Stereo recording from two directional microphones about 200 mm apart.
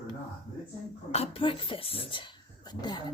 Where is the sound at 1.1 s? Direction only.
30° left (ahead or behind).